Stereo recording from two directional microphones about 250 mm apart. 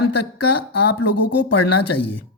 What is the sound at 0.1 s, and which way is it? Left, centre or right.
Speech, left.